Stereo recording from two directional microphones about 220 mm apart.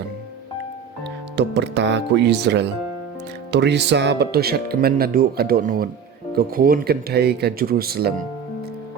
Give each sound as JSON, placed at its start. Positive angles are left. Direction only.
{"t": 1.4, "sound": "speech", "side_deg": -50}